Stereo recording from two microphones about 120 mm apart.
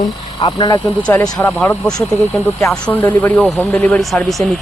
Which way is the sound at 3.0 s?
15° left (ahead or behind).